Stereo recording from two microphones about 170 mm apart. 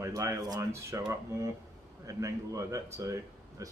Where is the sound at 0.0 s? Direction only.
20° right (ahead or behind).